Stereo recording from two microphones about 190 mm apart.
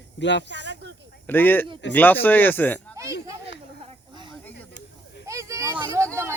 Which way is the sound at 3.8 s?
30° right (ahead or behind).